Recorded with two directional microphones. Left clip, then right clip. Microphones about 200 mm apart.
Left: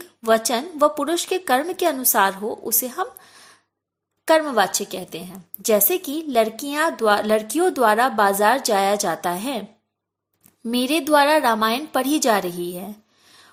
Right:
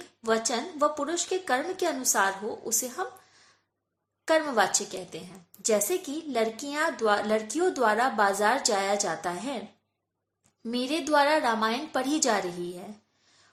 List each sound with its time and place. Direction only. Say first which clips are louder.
0.0 s a woman's voice: left 8 dB; 40° left (ahead or behind)
4.3 s a woman's voice: left 6 dB; 40° left (ahead or behind)